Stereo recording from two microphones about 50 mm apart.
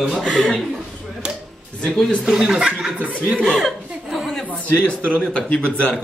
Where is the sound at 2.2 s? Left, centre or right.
Centre.